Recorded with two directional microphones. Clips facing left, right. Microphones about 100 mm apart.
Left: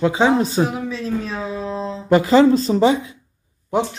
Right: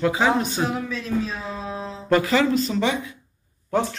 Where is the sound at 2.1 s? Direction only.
30° left (ahead or behind).